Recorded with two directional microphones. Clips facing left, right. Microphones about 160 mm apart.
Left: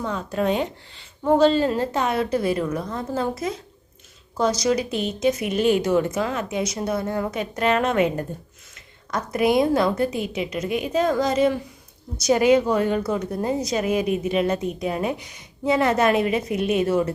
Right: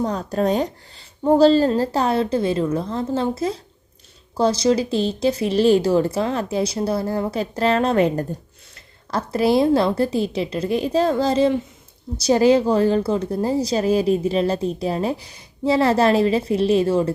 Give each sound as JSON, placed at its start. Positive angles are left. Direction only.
{"t": 0.0, "sound": "speech", "side_deg": -40}